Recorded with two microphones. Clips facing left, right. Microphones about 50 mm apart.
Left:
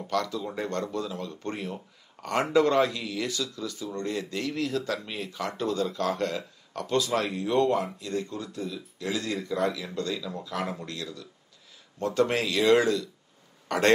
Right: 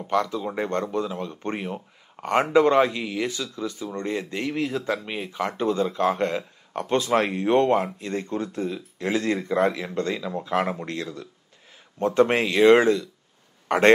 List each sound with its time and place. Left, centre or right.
0.0 s a man's voice: right